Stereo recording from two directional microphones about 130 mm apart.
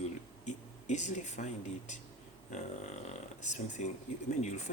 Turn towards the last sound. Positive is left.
turn(degrees=65)  # may be behind; listen again after turning